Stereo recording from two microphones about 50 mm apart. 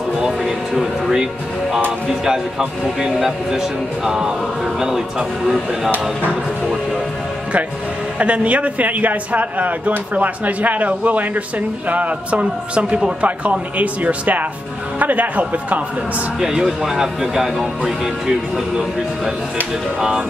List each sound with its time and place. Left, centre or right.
0.4 s speech: centre
3.2 s speech: centre
8.2 s a man's voice: right
16.3 s speech: centre
20.0 s speech: centre